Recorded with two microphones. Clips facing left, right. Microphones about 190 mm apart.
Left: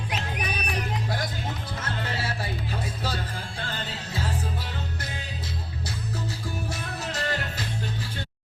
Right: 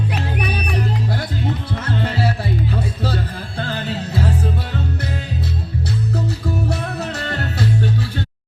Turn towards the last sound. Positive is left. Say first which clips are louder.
# right 12 dB
turn(degrees=-65)  # may be behind; listen again after turning